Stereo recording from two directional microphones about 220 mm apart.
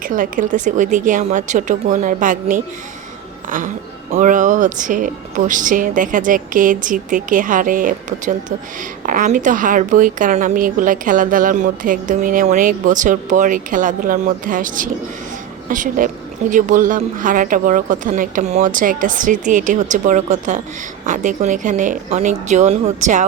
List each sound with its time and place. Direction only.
0.0 s a woman's voice: 40° right (ahead or behind)
4.1 s a woman's voice: 35° right (ahead or behind)